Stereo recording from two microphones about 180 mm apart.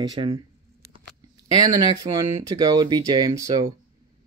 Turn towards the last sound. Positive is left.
turn(degrees=-20)  # may be behind; listen again after turning